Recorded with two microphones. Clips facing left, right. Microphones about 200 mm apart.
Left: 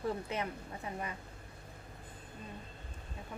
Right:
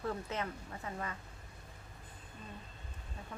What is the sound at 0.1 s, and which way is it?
Speech, 15° left (ahead or behind).